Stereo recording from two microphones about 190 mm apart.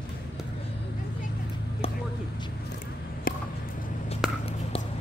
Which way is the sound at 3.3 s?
50° left (ahead or behind).